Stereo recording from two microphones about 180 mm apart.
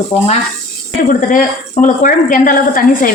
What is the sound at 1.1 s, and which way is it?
A woman's voice, 45° left (ahead or behind).